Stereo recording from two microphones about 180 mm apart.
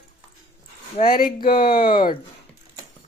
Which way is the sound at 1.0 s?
55° left (ahead or behind).